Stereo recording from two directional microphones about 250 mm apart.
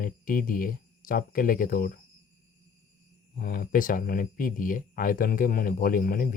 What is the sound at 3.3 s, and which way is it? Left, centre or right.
Speech, left.